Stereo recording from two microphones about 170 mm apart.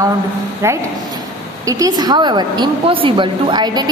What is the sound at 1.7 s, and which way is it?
A woman's voice, 20° right (ahead or behind).